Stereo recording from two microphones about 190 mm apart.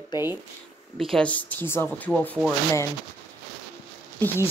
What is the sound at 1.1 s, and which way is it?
Speech, 5° left (ahead or behind).